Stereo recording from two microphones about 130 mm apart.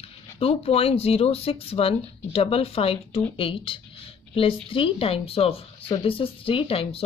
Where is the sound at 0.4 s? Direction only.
50° left (ahead or behind).